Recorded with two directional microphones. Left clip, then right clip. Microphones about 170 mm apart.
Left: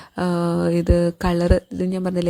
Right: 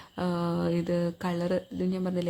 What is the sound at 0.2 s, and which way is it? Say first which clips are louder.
Speech: left 8 dB; 40° left (ahead or behind).